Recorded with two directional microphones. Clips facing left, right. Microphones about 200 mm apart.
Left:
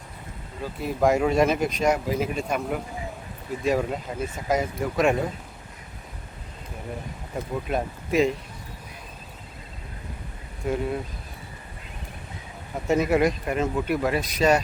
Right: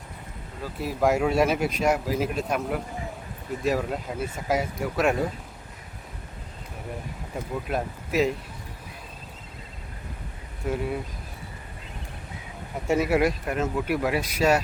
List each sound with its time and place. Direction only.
0.6 s speech: centre (ahead or behind)
7.7 s speech: 5° right (ahead or behind)
10.7 s speech: 5° right (ahead or behind)
12.9 s speech: 10° right (ahead or behind)